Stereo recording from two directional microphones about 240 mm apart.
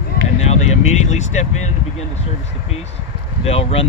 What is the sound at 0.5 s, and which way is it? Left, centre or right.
Speech, left.